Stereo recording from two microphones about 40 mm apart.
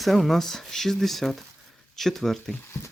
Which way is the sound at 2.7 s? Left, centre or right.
Left.